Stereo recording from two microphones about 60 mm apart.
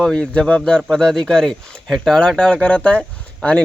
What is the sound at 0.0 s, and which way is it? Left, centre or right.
Speech, centre.